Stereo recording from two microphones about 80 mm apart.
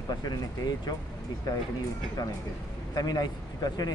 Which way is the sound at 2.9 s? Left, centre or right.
Left.